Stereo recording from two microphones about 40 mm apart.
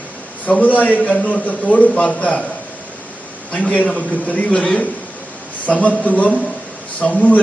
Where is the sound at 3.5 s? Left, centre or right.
Left.